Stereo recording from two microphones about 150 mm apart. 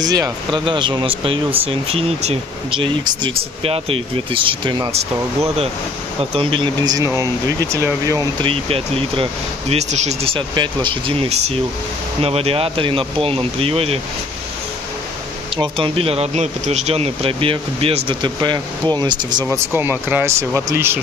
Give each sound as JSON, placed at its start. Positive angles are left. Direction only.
{"t": 0.0, "sound": "speech", "side_deg": -25}
{"t": 4.9, "sound": "speech", "side_deg": -45}
{"t": 6.3, "sound": "speech", "side_deg": -35}
{"t": 8.4, "sound": "speech", "side_deg": -40}
{"t": 15.5, "sound": "speech", "side_deg": -35}
{"t": 19.5, "sound": "speech", "side_deg": -15}